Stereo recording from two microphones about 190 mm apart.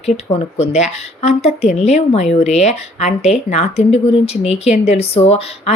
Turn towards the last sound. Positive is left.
turn(degrees=35)  # may be behind; listen again after turning